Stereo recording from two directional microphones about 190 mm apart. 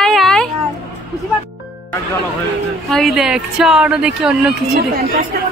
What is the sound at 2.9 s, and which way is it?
Speech, centre (ahead or behind).